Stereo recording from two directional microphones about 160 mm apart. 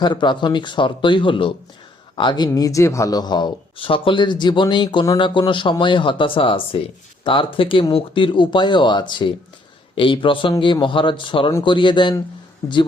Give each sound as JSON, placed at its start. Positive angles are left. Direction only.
{"t": 0.0, "sound": "speech", "side_deg": 30}